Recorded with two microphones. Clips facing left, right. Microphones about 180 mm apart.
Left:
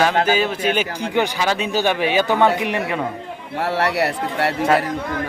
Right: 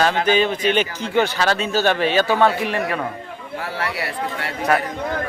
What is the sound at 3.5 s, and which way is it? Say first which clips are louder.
Speech: left 7 dB; 70° left (ahead or behind).